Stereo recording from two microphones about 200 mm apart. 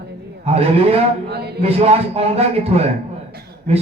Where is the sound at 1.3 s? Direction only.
55° right (ahead or behind).